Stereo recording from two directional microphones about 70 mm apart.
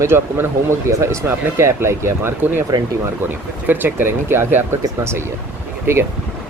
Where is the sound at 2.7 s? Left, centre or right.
Right.